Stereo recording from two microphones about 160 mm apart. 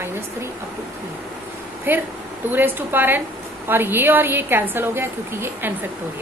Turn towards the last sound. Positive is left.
turn(degrees=-15)  # may be behind; listen again after turning